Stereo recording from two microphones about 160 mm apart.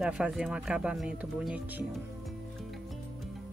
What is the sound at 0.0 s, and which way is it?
Speech, 5° right (ahead or behind).